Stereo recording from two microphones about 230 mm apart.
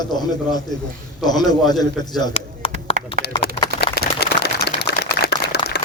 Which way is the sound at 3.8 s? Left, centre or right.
Left.